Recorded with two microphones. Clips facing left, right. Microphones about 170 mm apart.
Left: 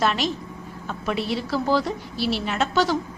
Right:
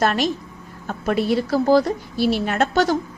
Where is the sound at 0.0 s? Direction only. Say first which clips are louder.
Right 3 dB; 50° right (ahead or behind).